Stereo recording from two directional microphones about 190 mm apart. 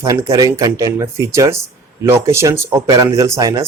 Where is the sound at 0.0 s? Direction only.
15° right (ahead or behind).